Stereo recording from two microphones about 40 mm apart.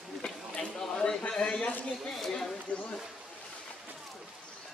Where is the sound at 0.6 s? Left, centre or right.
Centre.